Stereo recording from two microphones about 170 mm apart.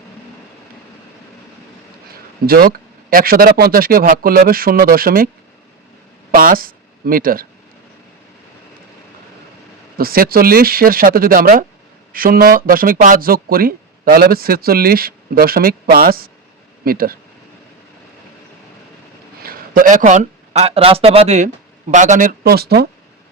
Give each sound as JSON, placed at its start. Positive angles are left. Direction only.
{"t": 2.5, "sound": "speech", "side_deg": -60}
{"t": 6.3, "sound": "speech", "side_deg": -55}
{"t": 10.0, "sound": "speech", "side_deg": -60}
{"t": 19.4, "sound": "speech", "side_deg": -60}